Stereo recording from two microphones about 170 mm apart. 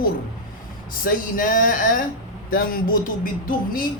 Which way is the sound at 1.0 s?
55° left (ahead or behind).